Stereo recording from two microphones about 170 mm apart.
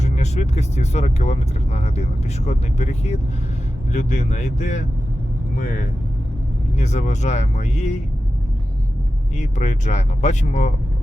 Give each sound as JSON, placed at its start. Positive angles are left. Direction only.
{"t": 0.0, "sound": "speech", "side_deg": 40}
{"t": 9.4, "sound": "speech", "side_deg": 45}